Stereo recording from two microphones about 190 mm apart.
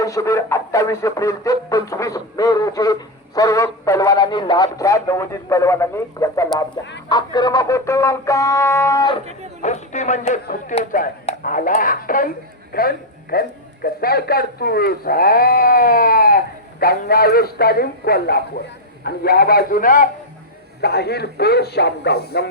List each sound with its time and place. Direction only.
0.0 s music: 15° left (ahead or behind)
9.6 s a man's voice: 40° left (ahead or behind)
20.8 s speech: 60° left (ahead or behind)